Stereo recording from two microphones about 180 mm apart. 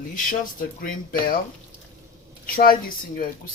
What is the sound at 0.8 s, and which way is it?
Speech, 50° left (ahead or behind).